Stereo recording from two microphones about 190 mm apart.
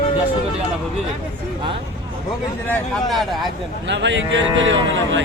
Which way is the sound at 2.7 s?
Centre (ahead or behind).